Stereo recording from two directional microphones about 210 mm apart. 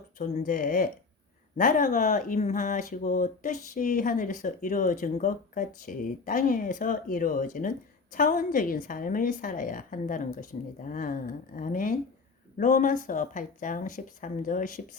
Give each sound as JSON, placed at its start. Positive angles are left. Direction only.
{"t": 0.2, "sound": "speech", "side_deg": 40}